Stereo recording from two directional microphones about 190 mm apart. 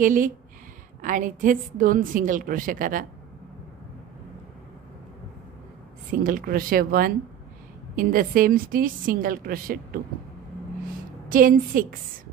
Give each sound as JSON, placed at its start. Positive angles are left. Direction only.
{"t": 0.0, "sound": "a woman's voice", "side_deg": -45}
{"t": 6.1, "sound": "a woman's voice", "side_deg": -45}
{"t": 11.2, "sound": "a woman's voice", "side_deg": -45}